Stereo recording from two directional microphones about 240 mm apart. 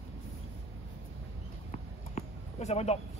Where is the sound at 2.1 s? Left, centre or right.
Left.